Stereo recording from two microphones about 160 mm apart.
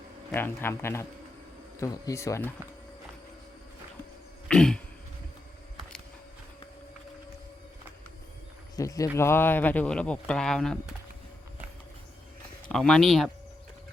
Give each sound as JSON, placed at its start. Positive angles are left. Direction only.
{"t": 0.3, "sound": "speech", "side_deg": 15}
{"t": 4.4, "sound": "a sound", "side_deg": 5}
{"t": 8.7, "sound": "speech", "side_deg": 20}
{"t": 12.6, "sound": "speech", "side_deg": 5}